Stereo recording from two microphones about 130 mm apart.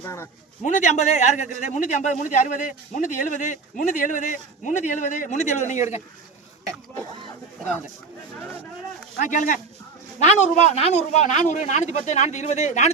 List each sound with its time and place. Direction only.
0.0 s a man's voice: 20° left (ahead or behind)
0.6 s a man's voice: 70° left (ahead or behind)
9.1 s a man's voice: 80° left
10.2 s speech: 65° left (ahead or behind)